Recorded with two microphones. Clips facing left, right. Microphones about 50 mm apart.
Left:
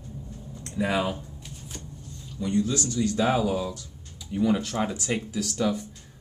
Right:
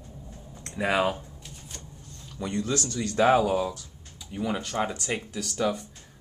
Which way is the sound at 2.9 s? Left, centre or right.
Right.